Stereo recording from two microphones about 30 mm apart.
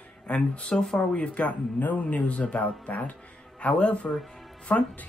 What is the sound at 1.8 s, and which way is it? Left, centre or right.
Speech, left.